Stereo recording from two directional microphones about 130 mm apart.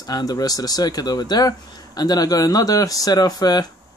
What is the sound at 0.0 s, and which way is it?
Speech, 30° left (ahead or behind).